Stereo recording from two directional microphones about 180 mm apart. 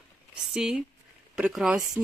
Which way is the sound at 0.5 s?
5° right (ahead or behind).